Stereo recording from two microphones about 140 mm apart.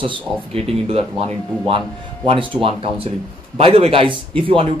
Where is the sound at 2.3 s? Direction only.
40° right (ahead or behind).